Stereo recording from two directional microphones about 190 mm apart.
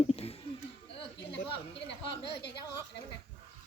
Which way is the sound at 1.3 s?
65° left (ahead or behind).